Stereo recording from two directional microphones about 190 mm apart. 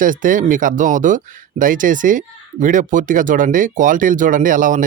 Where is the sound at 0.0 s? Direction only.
45° right (ahead or behind).